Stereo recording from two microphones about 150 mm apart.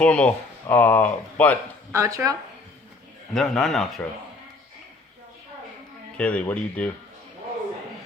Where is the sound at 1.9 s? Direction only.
20° right (ahead or behind).